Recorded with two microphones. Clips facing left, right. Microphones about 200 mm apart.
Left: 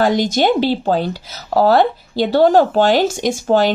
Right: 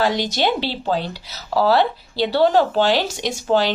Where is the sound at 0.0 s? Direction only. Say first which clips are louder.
Left 5 dB; 50° left (ahead or behind).